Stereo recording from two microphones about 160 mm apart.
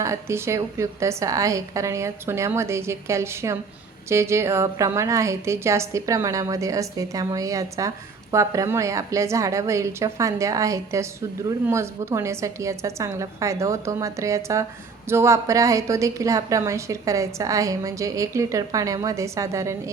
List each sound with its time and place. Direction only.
0.0 s a woman's voice: 15° right (ahead or behind)